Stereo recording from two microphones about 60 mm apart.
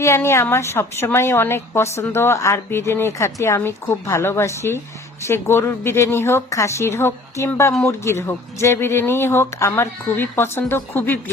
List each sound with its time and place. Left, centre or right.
0.0 s speech: left
3.6 s speech: left
4.0 s speech: left
6.5 s speech: left